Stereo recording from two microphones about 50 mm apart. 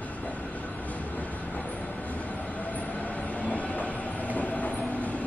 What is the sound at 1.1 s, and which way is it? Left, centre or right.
Train, left.